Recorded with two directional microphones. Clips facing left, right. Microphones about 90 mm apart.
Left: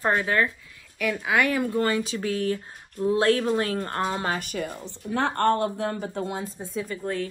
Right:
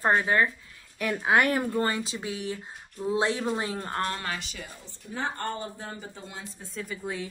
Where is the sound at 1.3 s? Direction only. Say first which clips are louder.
Even; 35° right (ahead or behind).